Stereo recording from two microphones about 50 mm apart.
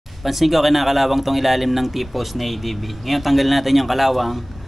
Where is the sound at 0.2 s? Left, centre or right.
Centre.